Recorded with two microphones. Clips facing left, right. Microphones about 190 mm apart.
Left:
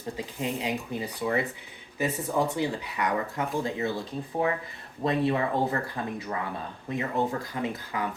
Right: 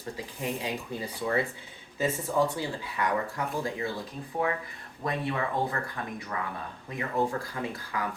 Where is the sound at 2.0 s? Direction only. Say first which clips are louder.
Even; 20° left (ahead or behind).